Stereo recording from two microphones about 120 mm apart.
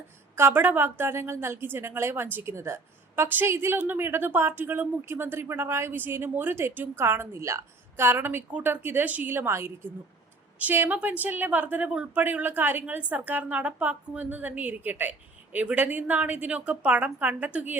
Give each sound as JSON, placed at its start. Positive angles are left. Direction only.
{"t": 0.3, "sound": "a woman's voice", "side_deg": -20}